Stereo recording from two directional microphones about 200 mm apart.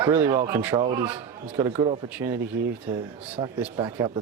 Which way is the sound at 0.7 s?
25° right (ahead or behind).